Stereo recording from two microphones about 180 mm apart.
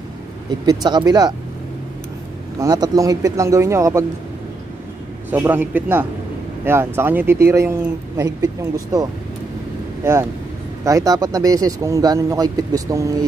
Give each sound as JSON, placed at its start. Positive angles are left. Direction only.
{"t": 0.7, "sound": "speech", "side_deg": -25}
{"t": 2.6, "sound": "speech", "side_deg": -20}
{"t": 5.3, "sound": "speech", "side_deg": -10}
{"t": 10.8, "sound": "speech", "side_deg": -20}